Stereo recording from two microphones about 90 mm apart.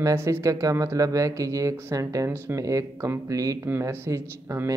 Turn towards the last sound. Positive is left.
turn(degrees=-35)  # may be behind; listen again after turning